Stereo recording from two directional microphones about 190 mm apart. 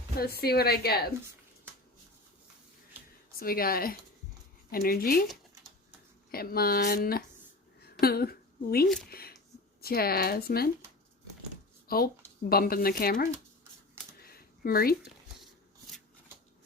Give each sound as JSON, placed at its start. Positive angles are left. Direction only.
{"t": 0.2, "sound": "a woman's voice", "side_deg": 55}
{"t": 3.3, "sound": "speech", "side_deg": 50}
{"t": 6.3, "sound": "a woman's voice", "side_deg": 50}
{"t": 11.9, "sound": "speech", "side_deg": 50}
{"t": 14.2, "sound": "a sound", "side_deg": 50}